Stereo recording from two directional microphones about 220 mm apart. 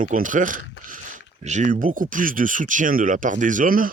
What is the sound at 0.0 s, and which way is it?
Speech, 35° right (ahead or behind).